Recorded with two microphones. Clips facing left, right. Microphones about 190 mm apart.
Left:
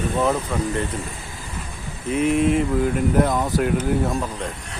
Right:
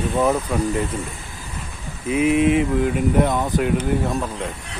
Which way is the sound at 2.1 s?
5° right (ahead or behind).